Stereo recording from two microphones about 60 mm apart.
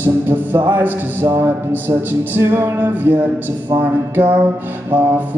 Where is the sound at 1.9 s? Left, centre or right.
Right.